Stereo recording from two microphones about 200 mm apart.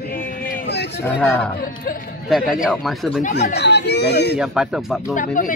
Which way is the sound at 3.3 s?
55° left (ahead or behind).